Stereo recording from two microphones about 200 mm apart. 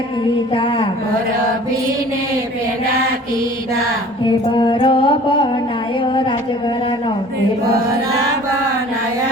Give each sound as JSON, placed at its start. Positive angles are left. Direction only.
{"t": 0.5, "sound": "speech", "side_deg": 25}
{"t": 4.5, "sound": "music", "side_deg": 25}